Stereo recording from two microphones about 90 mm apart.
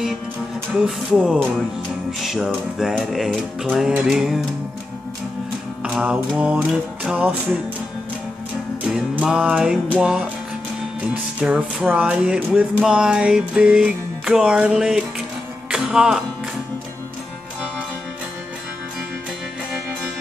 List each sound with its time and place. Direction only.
0.7 s speech: 5° right (ahead or behind)
5.9 s music: 10° right (ahead or behind)
8.8 s music: 15° right (ahead or behind)
11.4 s music: 15° right (ahead or behind)